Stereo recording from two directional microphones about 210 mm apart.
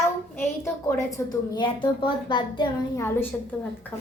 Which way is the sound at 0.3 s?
10° left (ahead or behind).